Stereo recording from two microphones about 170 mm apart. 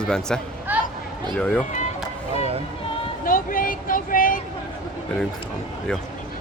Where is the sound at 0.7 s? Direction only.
10° right (ahead or behind).